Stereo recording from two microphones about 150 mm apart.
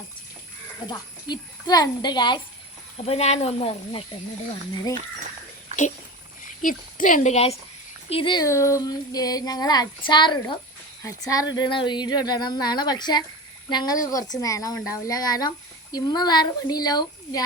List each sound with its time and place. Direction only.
0.9 s a woman's voice: 25° left (ahead or behind)
3.1 s speech: 45° left (ahead or behind)
6.4 s speech: 65° left (ahead or behind); by 7.5 s 45° left (ahead or behind)
8.1 s speech: 35° left (ahead or behind)
8.4 s a woman's voice: 20° left (ahead or behind)